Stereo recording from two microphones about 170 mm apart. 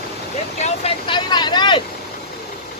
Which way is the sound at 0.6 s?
30° left (ahead or behind).